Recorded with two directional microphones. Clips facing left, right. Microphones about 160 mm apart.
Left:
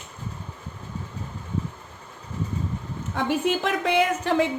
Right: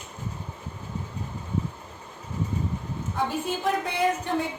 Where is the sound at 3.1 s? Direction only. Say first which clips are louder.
Left 5 dB; 90° left.